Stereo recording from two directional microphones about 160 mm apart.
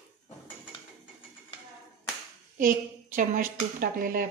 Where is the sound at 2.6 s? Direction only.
55° right (ahead or behind).